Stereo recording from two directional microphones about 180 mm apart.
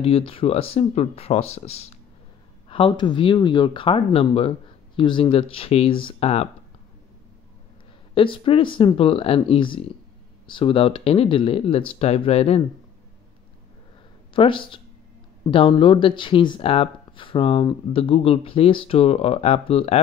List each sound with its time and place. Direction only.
0.0 s speech: 30° left (ahead or behind)
8.1 s speech: 30° left (ahead or behind)
14.3 s speech: 30° left (ahead or behind)